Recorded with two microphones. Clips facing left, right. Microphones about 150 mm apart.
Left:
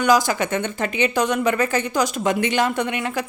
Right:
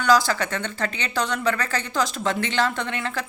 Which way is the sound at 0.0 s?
20° left (ahead or behind).